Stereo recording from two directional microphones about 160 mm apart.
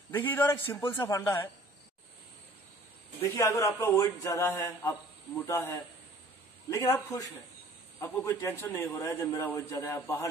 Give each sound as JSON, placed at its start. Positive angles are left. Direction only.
{"t": 0.1, "sound": "a man's voice", "side_deg": 10}
{"t": 3.3, "sound": "a man's voice", "side_deg": 20}